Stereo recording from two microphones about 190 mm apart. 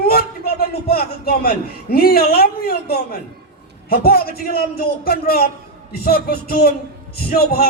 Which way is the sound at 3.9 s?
55° left (ahead or behind).